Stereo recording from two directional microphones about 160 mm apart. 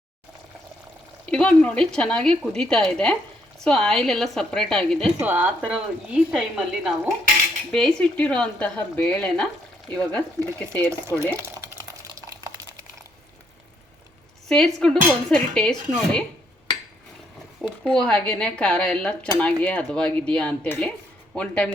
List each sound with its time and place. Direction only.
1.2 s speech: 5° left (ahead or behind)
5.2 s speech: 10° right (ahead or behind); by 11.3 s 10° left (ahead or behind)
11.7 s a sound: 15° right (ahead or behind)
14.4 s speech: 5° left (ahead or behind)
17.6 s speech: 5° left (ahead or behind)